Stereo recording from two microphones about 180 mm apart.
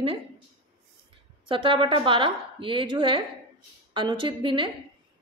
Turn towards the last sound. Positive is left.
turn(degrees=-25)  # may be behind; listen again after turning